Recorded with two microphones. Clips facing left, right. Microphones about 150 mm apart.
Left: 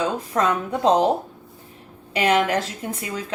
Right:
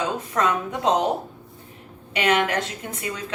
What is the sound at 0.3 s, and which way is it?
Speech, 35° left (ahead or behind).